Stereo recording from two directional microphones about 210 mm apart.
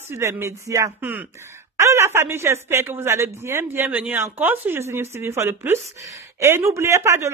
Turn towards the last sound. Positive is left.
turn(degrees=-15)  # may be behind; listen again after turning